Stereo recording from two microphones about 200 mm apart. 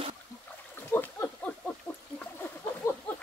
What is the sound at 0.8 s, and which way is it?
Splash, 10° left (ahead or behind).